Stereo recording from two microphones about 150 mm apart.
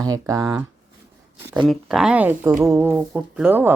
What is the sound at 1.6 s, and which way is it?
Speech, centre (ahead or behind).